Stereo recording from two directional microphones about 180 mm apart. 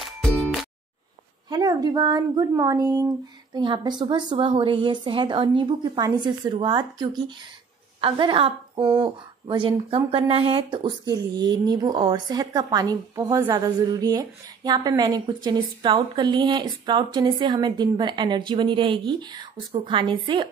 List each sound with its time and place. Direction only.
0.3 s music: 5° left (ahead or behind)
1.5 s a woman's voice: 20° right (ahead or behind)